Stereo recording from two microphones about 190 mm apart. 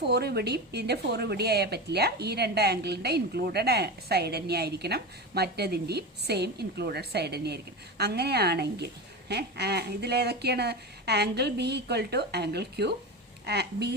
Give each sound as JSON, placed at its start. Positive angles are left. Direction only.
{"t": 0.0, "sound": "a woman's voice", "side_deg": -60}